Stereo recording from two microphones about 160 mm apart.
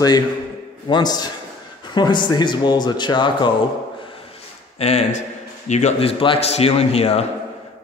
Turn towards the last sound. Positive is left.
turn(degrees=40)  # may be behind; listen again after turning